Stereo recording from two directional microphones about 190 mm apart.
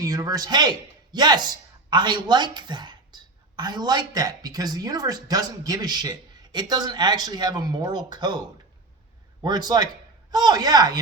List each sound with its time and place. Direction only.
0.0 s speech: 20° right (ahead or behind)